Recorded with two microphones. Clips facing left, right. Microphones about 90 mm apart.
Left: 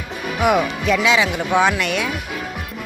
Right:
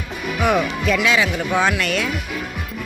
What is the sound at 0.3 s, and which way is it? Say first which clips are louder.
Speech: left 2 dB; 15° left (ahead or behind).